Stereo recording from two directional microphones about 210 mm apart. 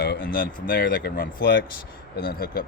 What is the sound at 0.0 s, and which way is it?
Speech, 45° left (ahead or behind).